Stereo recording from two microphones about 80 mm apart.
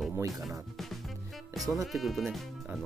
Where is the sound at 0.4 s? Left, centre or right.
Centre.